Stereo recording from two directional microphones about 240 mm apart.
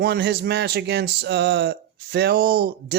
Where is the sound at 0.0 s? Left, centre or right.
Right.